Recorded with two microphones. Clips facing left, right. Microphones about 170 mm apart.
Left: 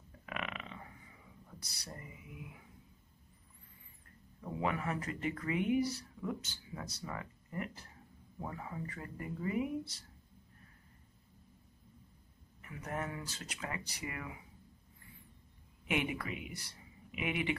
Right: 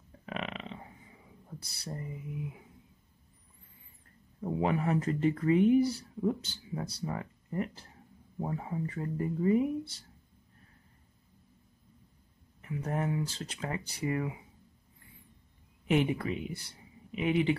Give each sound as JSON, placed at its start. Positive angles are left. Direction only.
{"t": 0.2, "sound": "a sound", "side_deg": -30}
{"t": 4.4, "sound": "speech", "side_deg": -30}
{"t": 12.6, "sound": "speech", "side_deg": -30}
{"t": 15.9, "sound": "speech", "side_deg": -30}